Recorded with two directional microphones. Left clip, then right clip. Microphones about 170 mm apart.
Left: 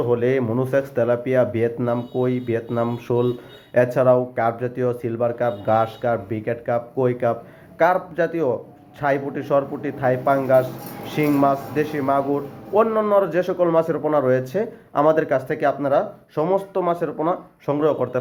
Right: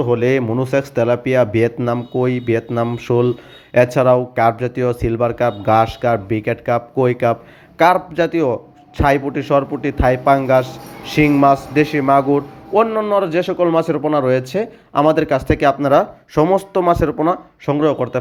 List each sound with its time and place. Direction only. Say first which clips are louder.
0.0 s a man's voice: right 4 dB; 30° right (ahead or behind)